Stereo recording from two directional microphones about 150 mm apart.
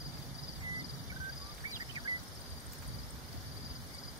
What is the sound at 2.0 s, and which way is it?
Insect, 30° right (ahead or behind).